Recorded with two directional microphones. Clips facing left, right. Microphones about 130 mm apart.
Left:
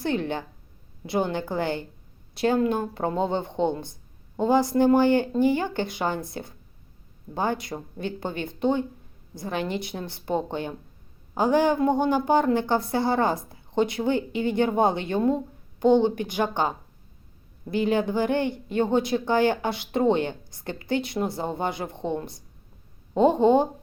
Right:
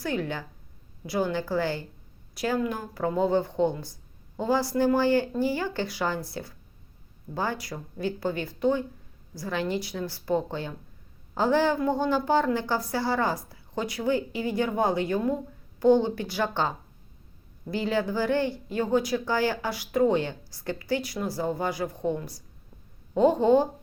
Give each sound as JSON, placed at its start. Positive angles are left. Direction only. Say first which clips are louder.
{"t": 0.0, "sound": "a woman's voice", "louder": "left 3 dB", "side_deg": 25}